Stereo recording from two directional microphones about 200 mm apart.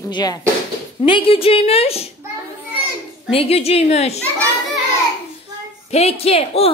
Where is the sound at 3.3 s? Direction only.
30° left (ahead or behind).